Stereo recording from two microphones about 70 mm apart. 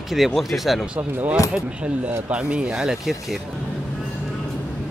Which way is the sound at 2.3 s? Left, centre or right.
Centre.